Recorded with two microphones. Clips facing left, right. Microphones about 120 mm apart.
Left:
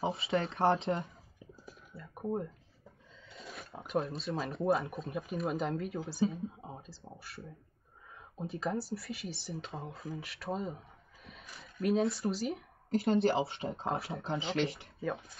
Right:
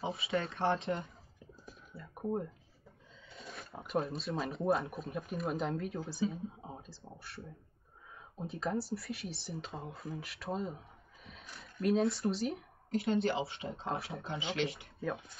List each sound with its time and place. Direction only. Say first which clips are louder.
0.1 s speech: left 2 dB; 25° left (ahead or behind)
1.0 s a sound: left 2 dB; 5° left (ahead or behind)
3.3 s speech: left 1 dB; centre (ahead or behind)
13.6 s speech: left 4 dB; 30° left (ahead or behind)
13.8 s speech: left 2 dB; centre (ahead or behind)
14.3 s speech: left 3 dB; 30° left (ahead or behind)
14.7 s speech: left 1 dB; centre (ahead or behind)